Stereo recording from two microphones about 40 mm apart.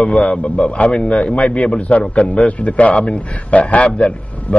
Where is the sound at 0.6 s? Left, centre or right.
Left.